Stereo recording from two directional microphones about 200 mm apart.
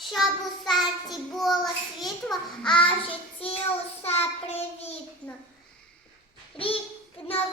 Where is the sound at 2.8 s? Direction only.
25° left (ahead or behind).